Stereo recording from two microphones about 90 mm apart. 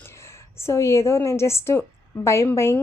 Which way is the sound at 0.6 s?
30° left (ahead or behind).